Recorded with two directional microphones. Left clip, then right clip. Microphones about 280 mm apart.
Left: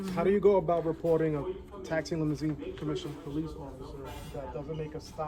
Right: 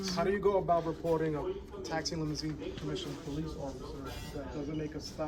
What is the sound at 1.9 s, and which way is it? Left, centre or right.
Speech, left.